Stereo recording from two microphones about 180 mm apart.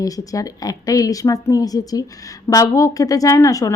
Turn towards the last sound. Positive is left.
turn(degrees=20)  # may be behind; listen again after turning